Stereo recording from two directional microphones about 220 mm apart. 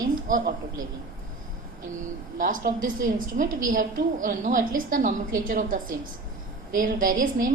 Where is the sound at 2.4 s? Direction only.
35° right (ahead or behind).